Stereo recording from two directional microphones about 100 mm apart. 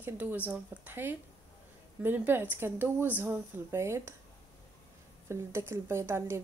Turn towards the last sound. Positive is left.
turn(degrees=-25)  # may be behind; listen again after turning